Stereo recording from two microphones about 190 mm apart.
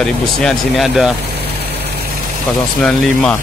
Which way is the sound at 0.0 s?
5° left (ahead or behind).